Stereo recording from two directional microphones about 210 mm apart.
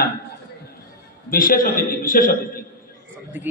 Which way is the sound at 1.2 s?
40° left (ahead or behind).